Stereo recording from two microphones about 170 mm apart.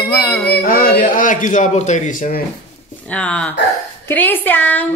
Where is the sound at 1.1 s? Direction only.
50° left (ahead or behind).